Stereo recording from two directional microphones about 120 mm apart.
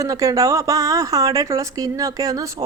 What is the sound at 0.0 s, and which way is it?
A woman's voice, 30° right (ahead or behind).